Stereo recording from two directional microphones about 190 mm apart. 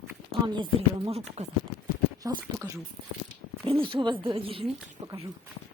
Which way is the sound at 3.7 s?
30° right (ahead or behind).